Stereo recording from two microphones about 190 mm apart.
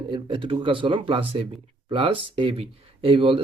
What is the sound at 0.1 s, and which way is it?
Speech, 25° right (ahead or behind).